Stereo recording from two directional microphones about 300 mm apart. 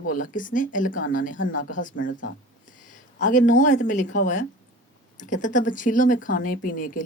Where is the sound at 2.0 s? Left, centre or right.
Left.